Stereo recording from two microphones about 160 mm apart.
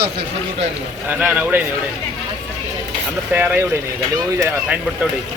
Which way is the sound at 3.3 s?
10° right (ahead or behind).